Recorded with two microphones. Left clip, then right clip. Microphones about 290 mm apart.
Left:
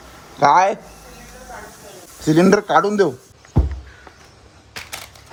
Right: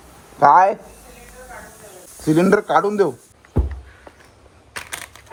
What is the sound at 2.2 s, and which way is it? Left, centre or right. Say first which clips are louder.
Speech: left 1 dB; centre.